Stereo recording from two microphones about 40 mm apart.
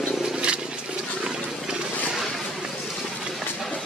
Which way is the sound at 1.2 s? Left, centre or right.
Centre.